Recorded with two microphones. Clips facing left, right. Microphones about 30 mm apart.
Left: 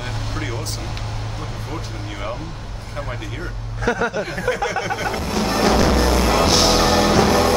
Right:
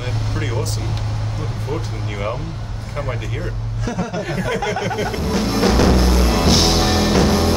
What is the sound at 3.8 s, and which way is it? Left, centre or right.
Speech, left.